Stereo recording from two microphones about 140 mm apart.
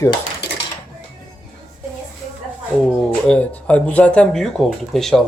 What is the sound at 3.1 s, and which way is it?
Speech, 10° left (ahead or behind).